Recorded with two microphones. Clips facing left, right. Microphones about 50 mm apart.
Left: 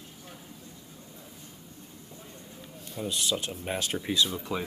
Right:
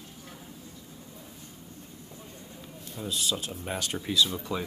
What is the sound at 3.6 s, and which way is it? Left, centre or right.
Speech, left.